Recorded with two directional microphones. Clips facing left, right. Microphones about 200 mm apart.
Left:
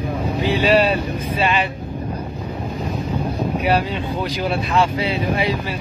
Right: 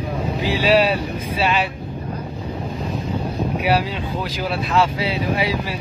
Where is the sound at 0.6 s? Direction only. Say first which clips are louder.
Even; 5° right (ahead or behind).